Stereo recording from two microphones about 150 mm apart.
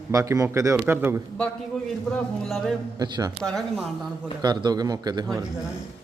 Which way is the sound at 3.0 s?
25° right (ahead or behind).